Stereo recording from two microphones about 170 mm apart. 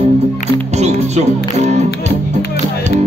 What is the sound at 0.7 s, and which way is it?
Music, 40° right (ahead or behind).